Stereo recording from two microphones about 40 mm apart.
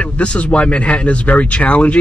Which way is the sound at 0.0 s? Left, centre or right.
Left.